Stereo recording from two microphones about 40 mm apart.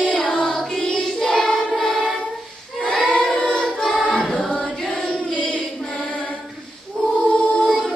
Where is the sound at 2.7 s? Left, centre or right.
Centre.